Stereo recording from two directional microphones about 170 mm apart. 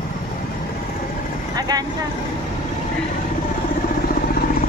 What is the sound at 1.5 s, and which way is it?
Speech, 20° right (ahead or behind).